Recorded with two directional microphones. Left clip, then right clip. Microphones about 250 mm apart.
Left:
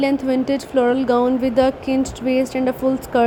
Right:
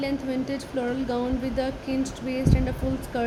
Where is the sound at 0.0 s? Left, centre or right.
Left.